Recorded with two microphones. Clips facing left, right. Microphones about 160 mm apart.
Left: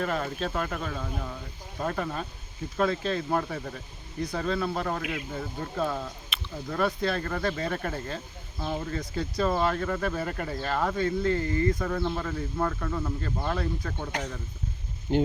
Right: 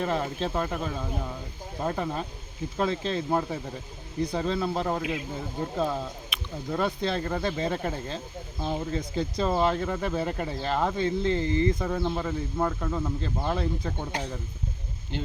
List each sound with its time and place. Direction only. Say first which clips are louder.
0.0 s speech: right 1 dB; 20° right (ahead or behind)
6.3 s a sound: right 1 dB; 10° right (ahead or behind)
6.7 s speech: even; 20° right (ahead or behind)
15.1 s speech: left 10 dB; 45° left (ahead or behind)